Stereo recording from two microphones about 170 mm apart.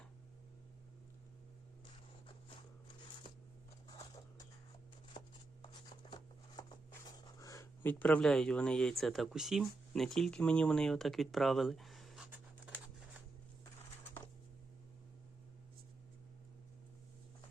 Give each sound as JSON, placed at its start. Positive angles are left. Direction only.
{"t": 3.8, "sound": "patter", "side_deg": 20}
{"t": 6.6, "sound": "writing", "side_deg": 20}